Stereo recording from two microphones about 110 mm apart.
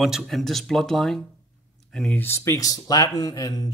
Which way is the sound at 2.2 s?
25° left (ahead or behind).